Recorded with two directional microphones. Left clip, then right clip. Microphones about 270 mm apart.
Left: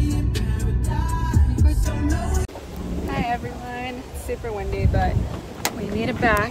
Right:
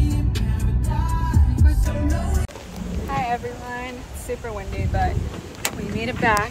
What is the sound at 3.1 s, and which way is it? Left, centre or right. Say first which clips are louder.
Speech: right 2 dB; centre.